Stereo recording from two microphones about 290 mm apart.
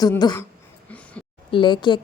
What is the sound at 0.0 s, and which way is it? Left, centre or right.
Speech, centre.